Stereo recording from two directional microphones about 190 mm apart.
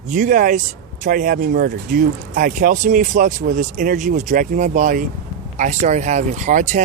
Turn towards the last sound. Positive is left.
turn(degrees=-40)  # may be behind; listen again after turning